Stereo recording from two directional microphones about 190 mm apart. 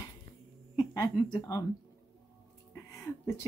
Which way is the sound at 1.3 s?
15° left (ahead or behind).